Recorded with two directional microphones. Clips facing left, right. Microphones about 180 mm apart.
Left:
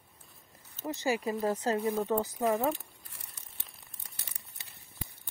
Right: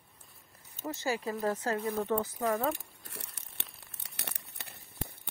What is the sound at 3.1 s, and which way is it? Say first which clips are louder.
Crumpling: right 7 dB; 75° right (ahead or behind).